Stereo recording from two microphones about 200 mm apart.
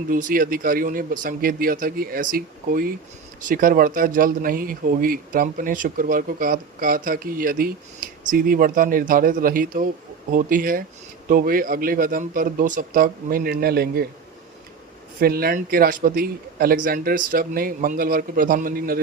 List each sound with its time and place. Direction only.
0.1 s speech: 45° right (ahead or behind)
15.2 s speech: 50° right (ahead or behind)